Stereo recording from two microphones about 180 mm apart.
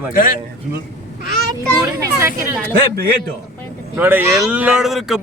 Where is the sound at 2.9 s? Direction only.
60° right (ahead or behind).